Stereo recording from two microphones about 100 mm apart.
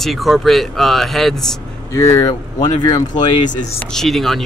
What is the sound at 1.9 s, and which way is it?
Speech, 30° left (ahead or behind).